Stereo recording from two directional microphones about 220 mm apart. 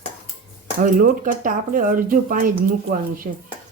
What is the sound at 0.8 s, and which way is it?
Speech, 40° right (ahead or behind).